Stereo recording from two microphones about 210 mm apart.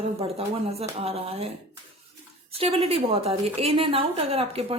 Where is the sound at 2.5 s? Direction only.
30° right (ahead or behind).